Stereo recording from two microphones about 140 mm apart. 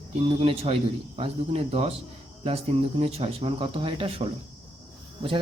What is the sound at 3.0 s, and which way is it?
Speech, 40° right (ahead or behind).